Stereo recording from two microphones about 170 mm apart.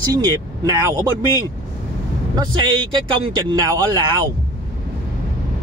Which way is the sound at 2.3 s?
25° right (ahead or behind).